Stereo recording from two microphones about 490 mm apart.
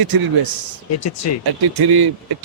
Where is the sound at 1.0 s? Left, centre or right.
Left.